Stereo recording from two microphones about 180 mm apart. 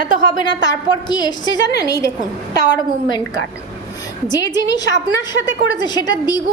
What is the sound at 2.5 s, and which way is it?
Speech, 75° left (ahead or behind).